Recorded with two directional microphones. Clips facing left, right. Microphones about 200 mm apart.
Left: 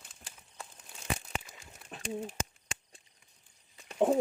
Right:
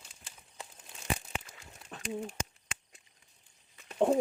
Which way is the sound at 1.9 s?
30° left (ahead or behind).